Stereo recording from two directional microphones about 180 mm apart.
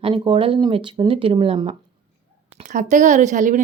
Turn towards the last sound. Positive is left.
turn(degrees=-45)  # may be behind; listen again after turning